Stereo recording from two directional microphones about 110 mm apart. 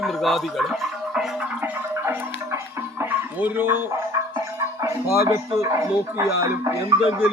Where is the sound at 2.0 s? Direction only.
25° right (ahead or behind).